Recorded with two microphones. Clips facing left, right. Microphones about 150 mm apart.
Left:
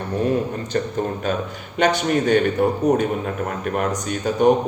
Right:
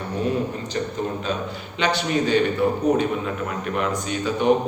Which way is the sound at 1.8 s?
50° left (ahead or behind).